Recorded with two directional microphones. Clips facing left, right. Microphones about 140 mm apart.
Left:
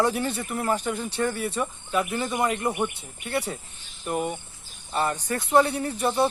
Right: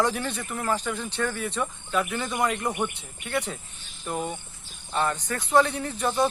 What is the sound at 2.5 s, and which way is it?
Speech, 10° left (ahead or behind).